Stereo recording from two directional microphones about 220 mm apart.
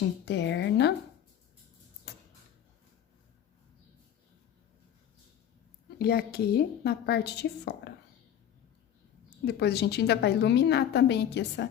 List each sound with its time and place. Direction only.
0.3 s a woman's voice: 50° left (ahead or behind)
6.0 s a woman's voice: 45° left (ahead or behind)
9.5 s a woman's voice: 50° left (ahead or behind)